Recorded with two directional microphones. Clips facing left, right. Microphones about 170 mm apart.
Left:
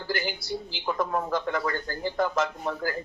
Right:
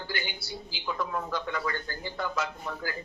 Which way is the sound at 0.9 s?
50° left (ahead or behind).